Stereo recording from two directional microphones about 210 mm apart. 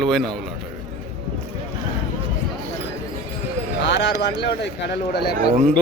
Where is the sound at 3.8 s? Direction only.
55° left (ahead or behind).